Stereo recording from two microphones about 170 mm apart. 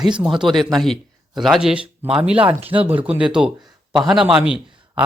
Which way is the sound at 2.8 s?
10° right (ahead or behind).